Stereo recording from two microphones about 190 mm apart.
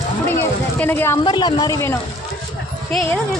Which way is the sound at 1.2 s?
25° left (ahead or behind).